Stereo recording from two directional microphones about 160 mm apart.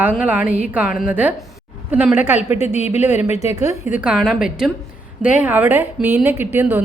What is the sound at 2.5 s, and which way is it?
A woman's voice, 45° left (ahead or behind).